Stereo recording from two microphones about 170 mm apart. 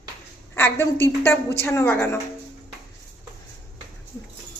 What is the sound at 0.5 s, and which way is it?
A woman's voice, 15° left (ahead or behind).